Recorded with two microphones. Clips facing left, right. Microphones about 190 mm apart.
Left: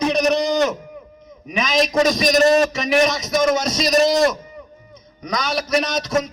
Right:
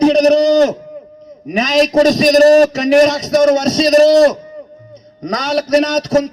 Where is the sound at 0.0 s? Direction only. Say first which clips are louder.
Right 9 dB; 35° right (ahead or behind).